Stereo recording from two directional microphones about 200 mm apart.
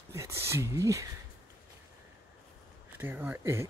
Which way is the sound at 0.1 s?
15° right (ahead or behind).